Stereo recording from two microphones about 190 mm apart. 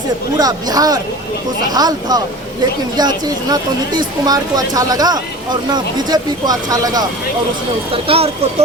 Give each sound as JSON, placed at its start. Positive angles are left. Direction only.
{"t": 0.3, "sound": "speech", "side_deg": -20}